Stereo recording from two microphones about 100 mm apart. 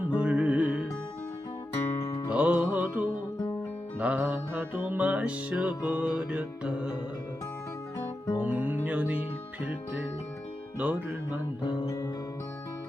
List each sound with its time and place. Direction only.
0.0 s music: 15° right (ahead or behind)
2.3 s music: 10° right (ahead or behind)
8.4 s music: 15° right (ahead or behind)
10.8 s music: 15° right (ahead or behind)
11.6 s guitar: 60° left (ahead or behind)
11.9 s music: 30° left (ahead or behind)